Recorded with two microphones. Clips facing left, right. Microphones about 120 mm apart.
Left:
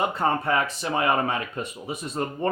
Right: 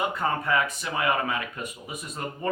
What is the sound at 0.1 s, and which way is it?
Speech, 30° left (ahead or behind).